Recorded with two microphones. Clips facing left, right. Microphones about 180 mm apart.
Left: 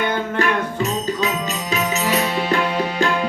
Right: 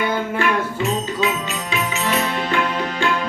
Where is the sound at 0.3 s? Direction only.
40° left (ahead or behind).